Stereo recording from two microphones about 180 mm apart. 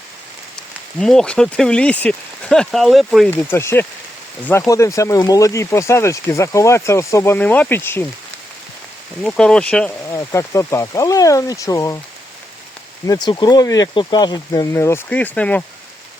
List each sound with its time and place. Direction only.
0.9 s speech: 5° left (ahead or behind)
3.2 s speech: 15° left (ahead or behind)
9.2 s speech: 5° left (ahead or behind)
10.1 s speech: 15° left (ahead or behind)
13.1 s speech: 20° left (ahead or behind)